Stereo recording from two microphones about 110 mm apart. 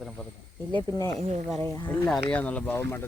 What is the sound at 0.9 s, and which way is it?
Speech, 30° left (ahead or behind).